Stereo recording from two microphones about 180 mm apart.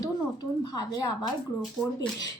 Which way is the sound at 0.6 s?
20° left (ahead or behind).